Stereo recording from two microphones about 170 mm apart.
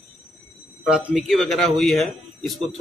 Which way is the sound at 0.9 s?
5° right (ahead or behind).